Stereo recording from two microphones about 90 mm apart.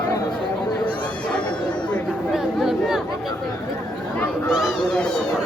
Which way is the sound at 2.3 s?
5° right (ahead or behind).